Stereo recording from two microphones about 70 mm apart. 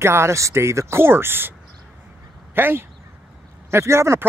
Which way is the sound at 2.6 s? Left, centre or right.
Right.